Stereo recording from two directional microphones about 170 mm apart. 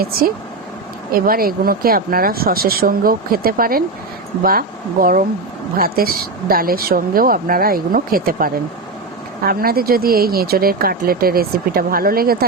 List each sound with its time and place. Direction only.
0.0 s speech: 60° right (ahead or behind)